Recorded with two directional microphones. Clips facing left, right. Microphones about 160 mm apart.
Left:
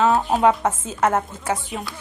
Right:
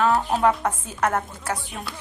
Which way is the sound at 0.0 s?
20° left (ahead or behind).